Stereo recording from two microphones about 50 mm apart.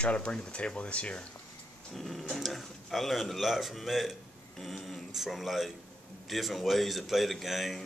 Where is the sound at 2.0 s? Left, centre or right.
Centre.